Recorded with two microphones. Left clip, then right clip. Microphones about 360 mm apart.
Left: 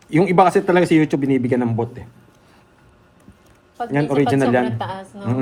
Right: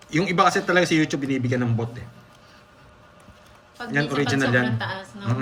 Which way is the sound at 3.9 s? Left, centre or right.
Centre.